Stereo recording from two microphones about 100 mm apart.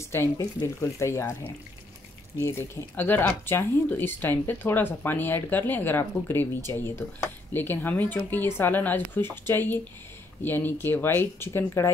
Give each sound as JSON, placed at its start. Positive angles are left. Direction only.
{"t": 0.0, "sound": "speech", "side_deg": 25}
{"t": 2.4, "sound": "speech", "side_deg": 20}